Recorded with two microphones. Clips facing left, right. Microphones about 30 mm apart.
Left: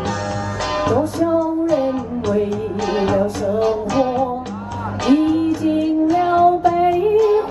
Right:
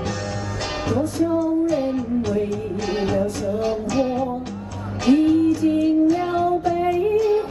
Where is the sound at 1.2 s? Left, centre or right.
Left.